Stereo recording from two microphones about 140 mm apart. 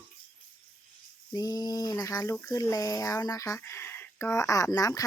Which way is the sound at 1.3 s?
30° left (ahead or behind).